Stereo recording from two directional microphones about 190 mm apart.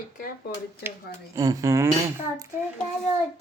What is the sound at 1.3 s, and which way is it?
Speech, 20° right (ahead or behind).